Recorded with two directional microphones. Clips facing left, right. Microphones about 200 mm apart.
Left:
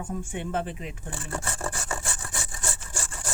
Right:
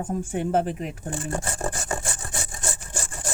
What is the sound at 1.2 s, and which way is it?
Wood, 40° right (ahead or behind).